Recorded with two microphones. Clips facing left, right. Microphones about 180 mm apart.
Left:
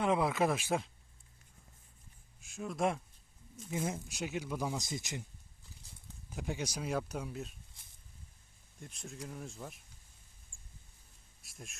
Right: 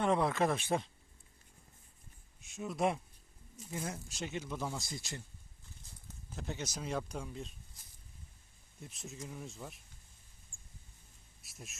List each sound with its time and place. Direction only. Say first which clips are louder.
0.0 s speech: even; 5° left (ahead or behind)
2.4 s speech: even; centre (ahead or behind)
3.8 s speech: left 4 dB; 20° left (ahead or behind)
4.2 s speech: left 2 dB; 10° left (ahead or behind)
6.3 s speech: left 3 dB; 10° left (ahead or behind)
8.8 s speech: left 1 dB; centre (ahead or behind)
11.4 s speech: left 1 dB; centre (ahead or behind)